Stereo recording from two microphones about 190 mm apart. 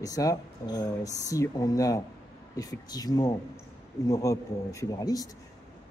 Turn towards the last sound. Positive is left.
turn(degrees=20)  # may be behind; listen again after turning